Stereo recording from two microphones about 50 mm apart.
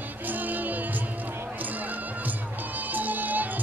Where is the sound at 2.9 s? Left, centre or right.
Right.